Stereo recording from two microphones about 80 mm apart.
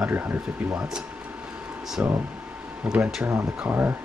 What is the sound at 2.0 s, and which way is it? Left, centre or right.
Speech, centre.